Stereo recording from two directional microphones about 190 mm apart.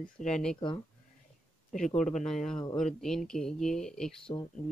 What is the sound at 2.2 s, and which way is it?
Speech, 5° left (ahead or behind).